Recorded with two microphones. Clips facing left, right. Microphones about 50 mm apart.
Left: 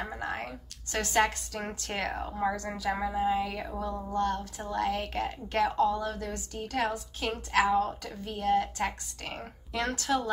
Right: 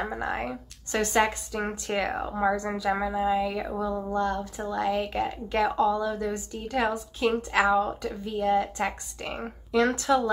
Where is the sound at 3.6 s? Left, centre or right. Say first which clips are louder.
Right 5 dB; right.